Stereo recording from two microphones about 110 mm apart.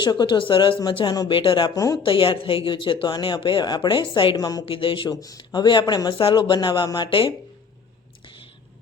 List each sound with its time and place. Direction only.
0.0 s speech: 45° left (ahead or behind)
1.7 s speech: 30° left (ahead or behind)
2.0 s speech: 55° left (ahead or behind)
4.4 s speech: 35° left (ahead or behind)
4.6 s speech: 55° left (ahead or behind)